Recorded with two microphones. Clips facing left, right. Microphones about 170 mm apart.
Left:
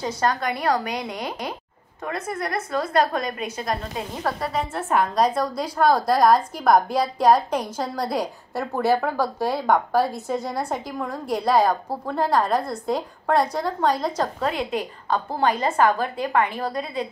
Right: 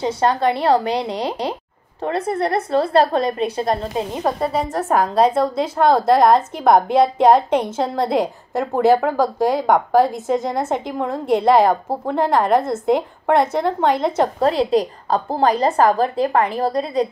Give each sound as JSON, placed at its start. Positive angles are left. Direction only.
{"t": 0.0, "sound": "a woman's voice", "side_deg": -30}
{"t": 4.5, "sound": "a woman's voice", "side_deg": -35}